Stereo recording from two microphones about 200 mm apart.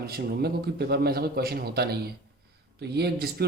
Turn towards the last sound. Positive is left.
turn(degrees=-55)  # may be behind; listen again after turning